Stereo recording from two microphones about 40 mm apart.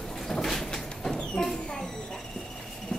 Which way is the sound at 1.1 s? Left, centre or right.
Centre.